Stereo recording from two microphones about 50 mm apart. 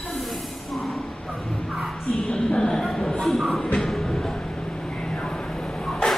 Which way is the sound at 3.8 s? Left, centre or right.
Centre.